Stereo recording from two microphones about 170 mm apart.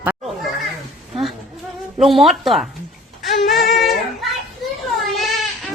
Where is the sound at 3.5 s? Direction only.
60° left (ahead or behind).